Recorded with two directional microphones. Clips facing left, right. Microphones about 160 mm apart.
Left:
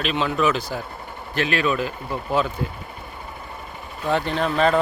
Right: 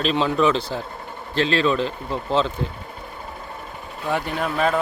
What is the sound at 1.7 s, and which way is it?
Speech, 10° left (ahead or behind).